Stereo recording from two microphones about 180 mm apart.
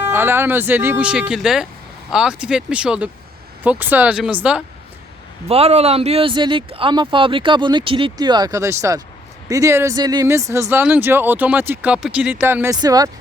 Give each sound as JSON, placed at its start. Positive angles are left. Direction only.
{"t": 0.0, "sound": "speech", "side_deg": -10}
{"t": 5.5, "sound": "speech", "side_deg": -35}